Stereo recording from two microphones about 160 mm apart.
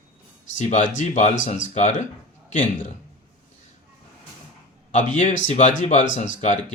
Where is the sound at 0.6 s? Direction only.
50° left (ahead or behind).